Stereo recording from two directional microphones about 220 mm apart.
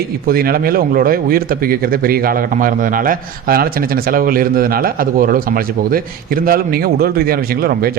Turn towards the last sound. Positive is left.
turn(degrees=-45)  # may be behind; listen again after turning